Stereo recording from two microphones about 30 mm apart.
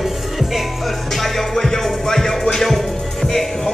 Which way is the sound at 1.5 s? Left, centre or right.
Centre.